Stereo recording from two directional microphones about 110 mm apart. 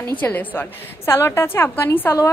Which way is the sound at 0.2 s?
15° left (ahead or behind).